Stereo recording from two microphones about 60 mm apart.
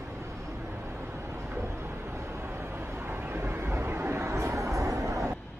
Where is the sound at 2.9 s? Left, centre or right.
Right.